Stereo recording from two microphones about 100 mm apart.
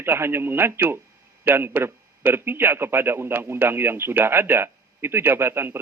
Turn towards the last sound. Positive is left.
turn(degrees=-25)  # may be behind; listen again after turning